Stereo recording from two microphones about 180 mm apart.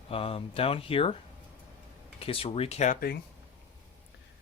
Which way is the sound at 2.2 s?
30° left (ahead or behind).